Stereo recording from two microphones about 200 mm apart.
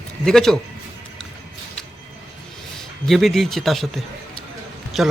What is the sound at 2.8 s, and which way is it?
Speech, centre (ahead or behind).